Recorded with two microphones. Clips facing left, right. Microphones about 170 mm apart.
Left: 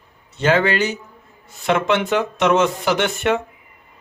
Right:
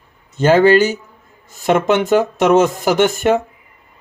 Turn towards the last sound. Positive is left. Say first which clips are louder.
# right 5 dB
turn(degrees=-40)  # may be behind; listen again after turning